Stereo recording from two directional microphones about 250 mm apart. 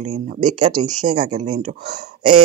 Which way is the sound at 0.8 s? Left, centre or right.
Right.